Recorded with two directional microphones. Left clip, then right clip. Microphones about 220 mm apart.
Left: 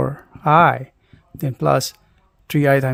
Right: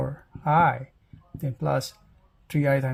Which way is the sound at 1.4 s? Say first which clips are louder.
Left 9 dB; 45° left (ahead or behind).